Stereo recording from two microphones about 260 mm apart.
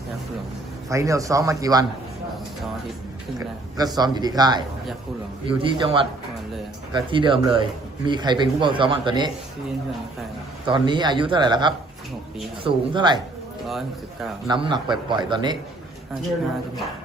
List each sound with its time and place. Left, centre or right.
0.9 s a man's voice: centre
3.3 s a man's voice: centre
10.7 s a man's voice: centre
13.7 s speech: centre
14.4 s a man's voice: centre